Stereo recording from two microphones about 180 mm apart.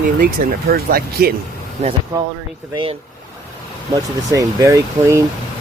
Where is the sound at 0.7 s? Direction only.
55° right (ahead or behind).